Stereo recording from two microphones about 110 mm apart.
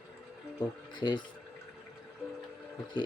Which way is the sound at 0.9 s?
40° left (ahead or behind).